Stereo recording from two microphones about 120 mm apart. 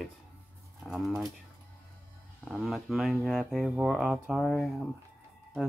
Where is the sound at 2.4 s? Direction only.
Centre (ahead or behind).